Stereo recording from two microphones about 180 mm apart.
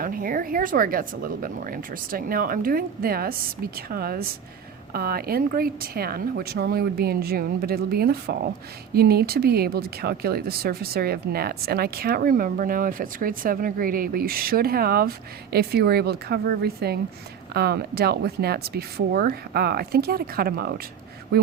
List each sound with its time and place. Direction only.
0.0 s speech: 50° right (ahead or behind)